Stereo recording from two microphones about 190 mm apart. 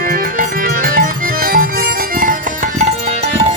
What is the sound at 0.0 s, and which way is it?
Music, 50° right (ahead or behind).